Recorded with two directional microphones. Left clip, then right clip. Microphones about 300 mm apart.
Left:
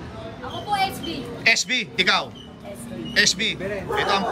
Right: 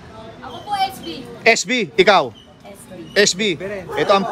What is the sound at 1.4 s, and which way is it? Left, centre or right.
Speech, centre.